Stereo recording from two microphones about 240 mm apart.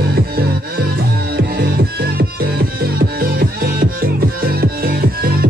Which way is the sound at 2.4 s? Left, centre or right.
Right.